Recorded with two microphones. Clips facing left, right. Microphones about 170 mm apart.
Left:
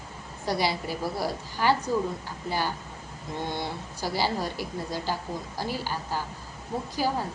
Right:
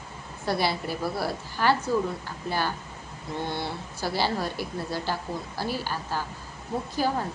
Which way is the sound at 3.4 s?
15° left (ahead or behind).